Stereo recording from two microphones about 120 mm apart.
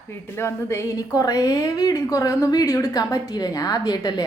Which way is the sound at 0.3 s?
20° left (ahead or behind).